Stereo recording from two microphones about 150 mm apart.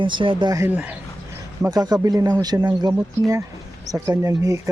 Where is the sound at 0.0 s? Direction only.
35° right (ahead or behind).